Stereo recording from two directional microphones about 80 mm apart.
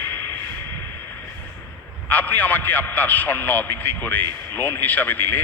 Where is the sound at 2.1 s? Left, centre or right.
Left.